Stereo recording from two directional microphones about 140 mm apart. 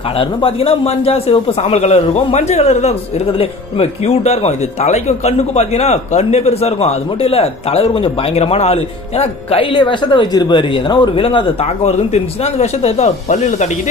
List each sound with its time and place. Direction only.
0.2 s speech: 40° left (ahead or behind)